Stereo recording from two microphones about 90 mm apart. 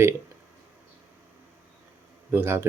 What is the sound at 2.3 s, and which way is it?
Speech, 25° right (ahead or behind).